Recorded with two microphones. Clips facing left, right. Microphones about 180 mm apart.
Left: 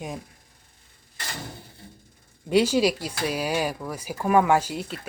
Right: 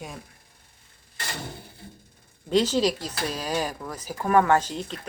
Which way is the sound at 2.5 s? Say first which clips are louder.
Left 2 dB; 10° left (ahead or behind).